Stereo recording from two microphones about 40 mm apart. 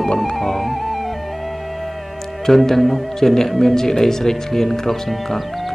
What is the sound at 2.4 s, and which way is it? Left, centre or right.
Speech, centre.